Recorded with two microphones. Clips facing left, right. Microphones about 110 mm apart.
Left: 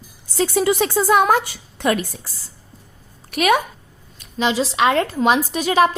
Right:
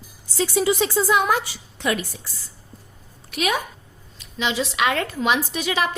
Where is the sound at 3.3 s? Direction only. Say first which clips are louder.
Left 7 dB; 60° left (ahead or behind).